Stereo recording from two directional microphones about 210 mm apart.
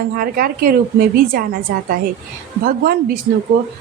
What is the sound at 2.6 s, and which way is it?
Speech, 45° right (ahead or behind).